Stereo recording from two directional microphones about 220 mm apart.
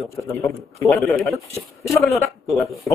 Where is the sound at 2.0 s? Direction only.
30° left (ahead or behind).